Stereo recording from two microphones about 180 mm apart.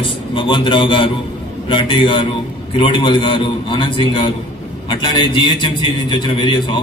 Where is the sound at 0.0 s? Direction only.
25° left (ahead or behind).